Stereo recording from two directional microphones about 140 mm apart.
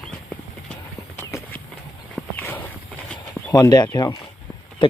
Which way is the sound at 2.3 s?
15° left (ahead or behind).